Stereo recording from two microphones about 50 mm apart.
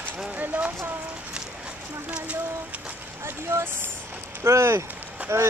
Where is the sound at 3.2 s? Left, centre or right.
Right.